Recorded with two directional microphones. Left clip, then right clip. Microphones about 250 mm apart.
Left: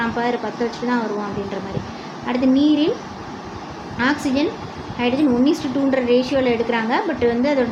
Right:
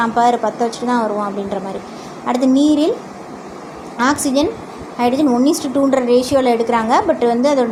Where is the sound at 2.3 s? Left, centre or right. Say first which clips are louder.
Right 3 dB; centre.